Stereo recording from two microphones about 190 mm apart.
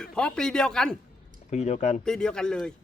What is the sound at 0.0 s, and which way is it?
Speech, 5° left (ahead or behind).